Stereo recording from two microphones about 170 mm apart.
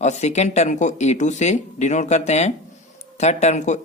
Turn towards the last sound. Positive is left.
turn(degrees=45)  # may be behind; listen again after turning